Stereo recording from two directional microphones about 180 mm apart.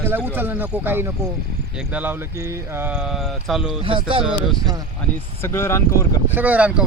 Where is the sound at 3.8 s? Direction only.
30° right (ahead or behind).